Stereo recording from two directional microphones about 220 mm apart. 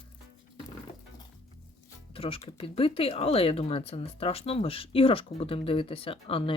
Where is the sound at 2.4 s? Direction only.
20° left (ahead or behind).